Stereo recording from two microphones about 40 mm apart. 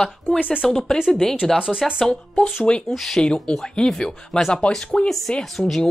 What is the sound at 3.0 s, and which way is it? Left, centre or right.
Speech, centre.